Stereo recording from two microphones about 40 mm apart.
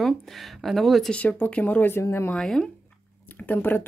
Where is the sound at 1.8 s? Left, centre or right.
Left.